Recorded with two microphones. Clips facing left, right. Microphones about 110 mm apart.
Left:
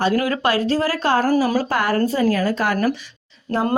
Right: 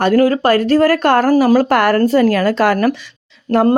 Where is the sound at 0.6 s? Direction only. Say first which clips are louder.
Right 8 dB; 60° right (ahead or behind).